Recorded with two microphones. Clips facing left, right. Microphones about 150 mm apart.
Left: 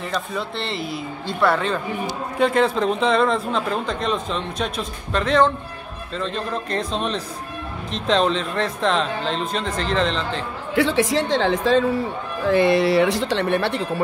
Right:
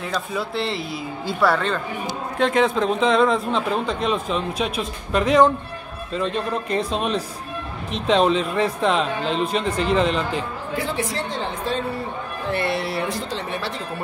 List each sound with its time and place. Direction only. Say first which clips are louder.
0.0 s a man's voice: even; centre (ahead or behind)
10.8 s a woman's voice: left 8 dB; 90° left; by 14.0 s 65° left (ahead or behind)